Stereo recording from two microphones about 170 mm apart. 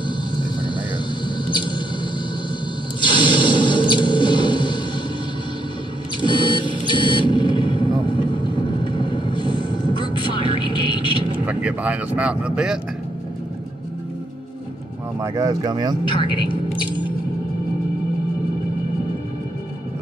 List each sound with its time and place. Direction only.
1.5 s mouse: 30° left (ahead or behind)
3.0 s a sound: 30° left (ahead or behind)
6.2 s vehicle: 30° left (ahead or behind)
11.4 s speech: 10° right (ahead or behind)
15.1 s speech: 20° right (ahead or behind)
16.1 s speech: 30° left (ahead or behind)